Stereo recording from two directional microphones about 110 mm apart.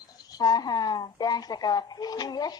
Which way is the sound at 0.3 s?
35° left (ahead or behind).